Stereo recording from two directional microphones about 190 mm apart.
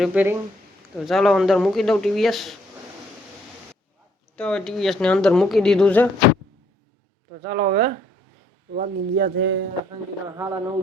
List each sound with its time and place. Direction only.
0.0 s speech: 10° right (ahead or behind)
4.4 s speech: 5° left (ahead or behind)
7.5 s speech: 45° right (ahead or behind); by 9.6 s 60° right (ahead or behind)
10.2 s speech: 15° right (ahead or behind)